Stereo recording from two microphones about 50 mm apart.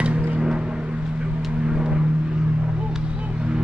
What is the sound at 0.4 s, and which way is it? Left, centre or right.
Vehicle, centre.